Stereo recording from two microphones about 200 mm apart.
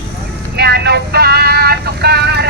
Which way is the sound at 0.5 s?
55° right (ahead or behind).